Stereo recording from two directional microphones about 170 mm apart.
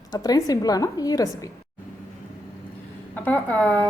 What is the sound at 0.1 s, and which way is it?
A woman's voice, 20° left (ahead or behind).